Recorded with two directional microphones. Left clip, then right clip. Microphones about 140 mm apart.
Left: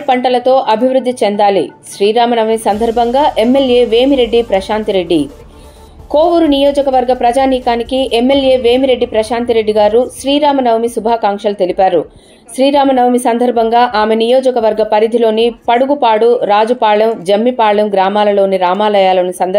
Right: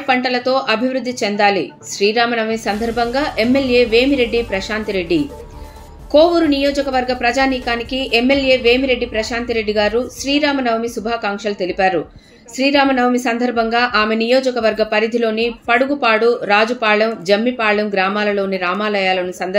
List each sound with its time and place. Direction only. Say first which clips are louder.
0.0 s a woman's voice: left 6 dB; 15° left (ahead or behind)